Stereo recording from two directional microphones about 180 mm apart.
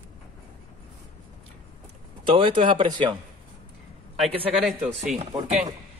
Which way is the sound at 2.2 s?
30° right (ahead or behind).